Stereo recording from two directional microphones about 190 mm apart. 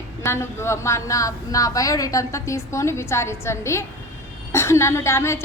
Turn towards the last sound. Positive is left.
turn(degrees=15)  # may be behind; listen again after turning